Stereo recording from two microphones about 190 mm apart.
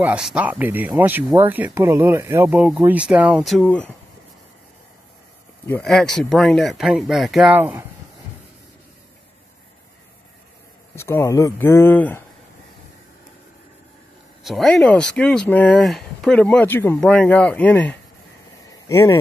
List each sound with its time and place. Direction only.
0.0 s speech: 5° right (ahead or behind)
5.7 s speech: 5° left (ahead or behind)
11.0 s speech: 15° left (ahead or behind)
14.4 s speech: centre (ahead or behind)